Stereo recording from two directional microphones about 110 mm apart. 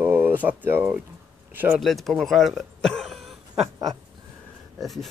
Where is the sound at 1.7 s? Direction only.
Centre (ahead or behind).